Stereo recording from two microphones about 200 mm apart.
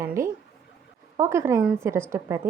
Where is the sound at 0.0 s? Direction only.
15° right (ahead or behind).